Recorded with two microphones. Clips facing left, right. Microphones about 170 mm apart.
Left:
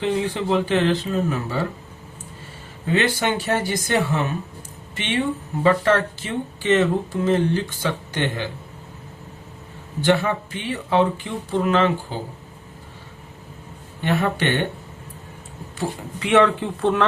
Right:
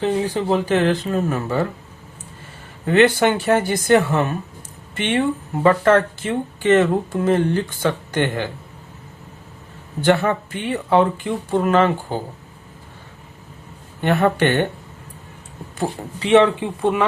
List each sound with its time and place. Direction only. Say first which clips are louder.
0.0 s speech: right 2 dB; 40° right (ahead or behind)
2.8 s speech: right 6 dB; 55° right (ahead or behind)
10.0 s speech: right 2 dB; 50° right (ahead or behind)
14.0 s speech: right 5 dB; 55° right (ahead or behind)
16.2 s speech: right 3 dB; 25° right (ahead or behind)
16.6 s speech: right 1 dB; 10° right (ahead or behind)